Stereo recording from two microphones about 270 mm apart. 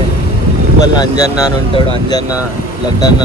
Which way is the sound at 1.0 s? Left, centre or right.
Centre.